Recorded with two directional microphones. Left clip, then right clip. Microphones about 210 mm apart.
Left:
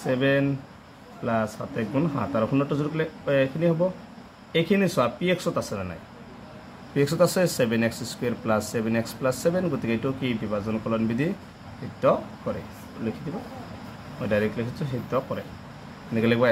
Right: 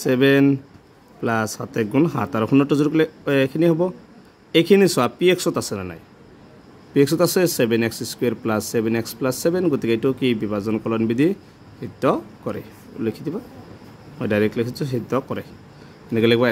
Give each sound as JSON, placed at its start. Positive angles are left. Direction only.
{"t": 0.0, "sound": "speech", "side_deg": -60}
{"t": 14.2, "sound": "speech", "side_deg": -55}